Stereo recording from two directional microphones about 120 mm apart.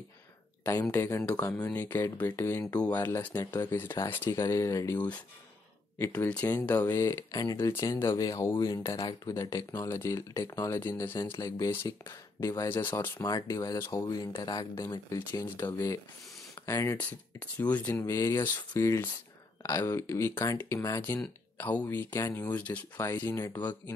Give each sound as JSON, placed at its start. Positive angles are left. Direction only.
{"t": 0.9, "sound": "speech", "side_deg": 20}
{"t": 3.3, "sound": "speech", "side_deg": 40}
{"t": 3.7, "sound": "speech", "side_deg": 20}
{"t": 5.9, "sound": "speech", "side_deg": 15}
{"t": 14.0, "sound": "speech", "side_deg": 40}
{"t": 15.4, "sound": "speech", "side_deg": 15}
{"t": 17.6, "sound": "speech", "side_deg": 15}